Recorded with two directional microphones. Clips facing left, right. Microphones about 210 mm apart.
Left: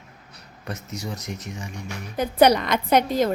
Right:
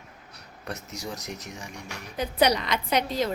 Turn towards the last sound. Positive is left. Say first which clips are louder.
# left 6 dB
turn(degrees=50)  # may be behind; listen again after turning